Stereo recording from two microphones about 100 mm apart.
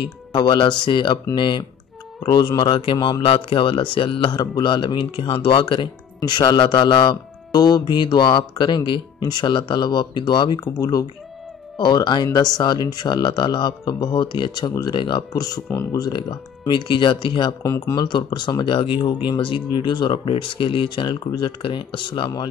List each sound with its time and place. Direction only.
0.0 s a man's voice: 50° left (ahead or behind)
4.4 s speech: 45° left (ahead or behind)
10.6 s speech: 35° left (ahead or behind)
11.8 s speech: 50° left (ahead or behind)
17.6 s speech: 30° left (ahead or behind)
17.9 s speech: 50° left (ahead or behind)